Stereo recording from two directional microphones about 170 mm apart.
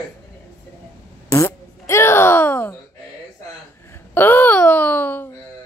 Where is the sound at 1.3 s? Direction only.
15° left (ahead or behind).